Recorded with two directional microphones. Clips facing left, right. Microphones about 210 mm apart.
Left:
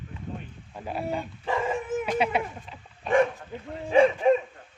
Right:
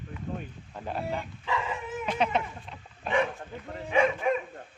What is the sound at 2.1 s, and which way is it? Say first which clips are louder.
Speech: right 1 dB; 10° left (ahead or behind).